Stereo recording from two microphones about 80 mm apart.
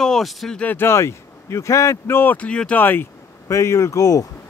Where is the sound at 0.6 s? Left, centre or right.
Left.